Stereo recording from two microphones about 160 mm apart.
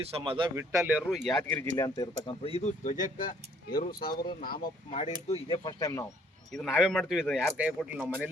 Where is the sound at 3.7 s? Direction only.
70° left (ahead or behind).